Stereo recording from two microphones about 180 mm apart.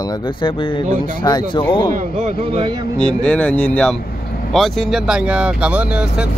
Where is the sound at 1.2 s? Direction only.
25° left (ahead or behind).